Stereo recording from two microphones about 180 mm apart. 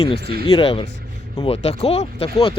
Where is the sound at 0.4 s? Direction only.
30° left (ahead or behind).